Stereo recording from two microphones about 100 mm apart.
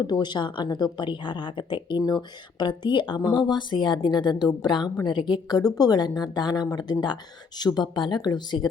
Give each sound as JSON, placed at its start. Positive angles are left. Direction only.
{"t": 0.0, "sound": "a woman's voice", "side_deg": 45}